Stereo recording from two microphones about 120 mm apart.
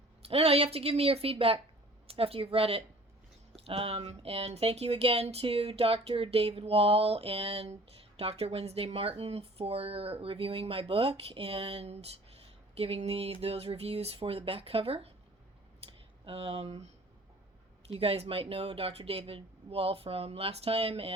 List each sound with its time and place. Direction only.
0.2 s speech: 55° right (ahead or behind)
15.9 s a sound: 50° right (ahead or behind)
17.8 s speech: 55° right (ahead or behind)